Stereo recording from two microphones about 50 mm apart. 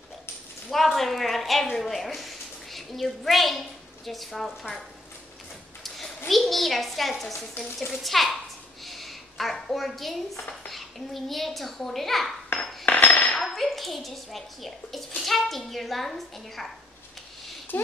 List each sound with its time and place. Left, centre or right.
0.7 s a woman's voice: centre
5.9 s a child's voice: centre
8.8 s a sound: centre
10.7 s a child's voice: centre
12.8 s a sound: left
13.4 s speech: centre